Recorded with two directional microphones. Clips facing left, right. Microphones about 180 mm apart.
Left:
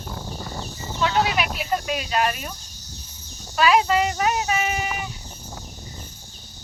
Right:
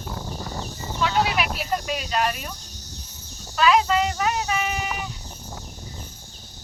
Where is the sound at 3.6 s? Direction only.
10° left (ahead or behind).